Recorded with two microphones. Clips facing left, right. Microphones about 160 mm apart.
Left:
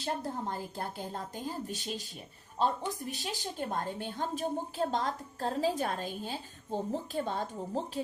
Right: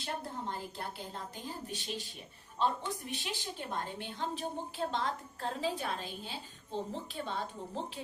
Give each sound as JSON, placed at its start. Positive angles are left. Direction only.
{"t": 0.0, "sound": "a woman's voice", "side_deg": 45}